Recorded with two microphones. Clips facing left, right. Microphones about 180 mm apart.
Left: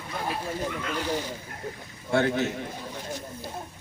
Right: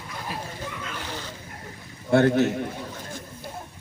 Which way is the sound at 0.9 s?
15° left (ahead or behind).